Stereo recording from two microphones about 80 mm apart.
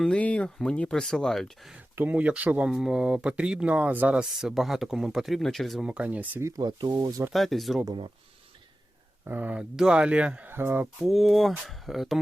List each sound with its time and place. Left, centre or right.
0.2 s speech: centre
2.0 s speech: centre
4.4 s speech: centre
5.8 s speech: centre
6.6 s speech: right
7.3 s speech: centre
9.2 s speech: right
10.5 s speech: right
11.0 s speech: centre